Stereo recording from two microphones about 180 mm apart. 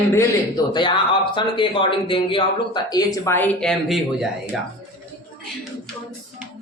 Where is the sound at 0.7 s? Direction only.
25° left (ahead or behind); by 4.3 s centre (ahead or behind).